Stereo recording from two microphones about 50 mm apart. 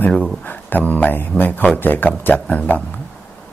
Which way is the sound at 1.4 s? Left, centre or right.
Left.